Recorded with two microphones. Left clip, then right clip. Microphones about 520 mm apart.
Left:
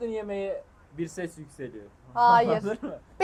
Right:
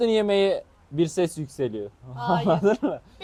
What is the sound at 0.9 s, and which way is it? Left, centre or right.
A man's voice, right.